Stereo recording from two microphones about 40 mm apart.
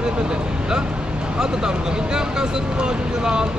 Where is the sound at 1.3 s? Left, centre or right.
Centre.